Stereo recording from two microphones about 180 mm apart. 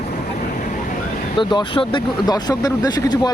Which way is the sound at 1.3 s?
25° left (ahead or behind).